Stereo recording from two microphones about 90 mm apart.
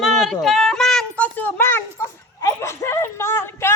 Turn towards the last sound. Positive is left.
turn(degrees=25)  # may be behind; listen again after turning